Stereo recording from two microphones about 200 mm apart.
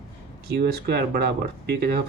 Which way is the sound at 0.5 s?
50° right (ahead or behind).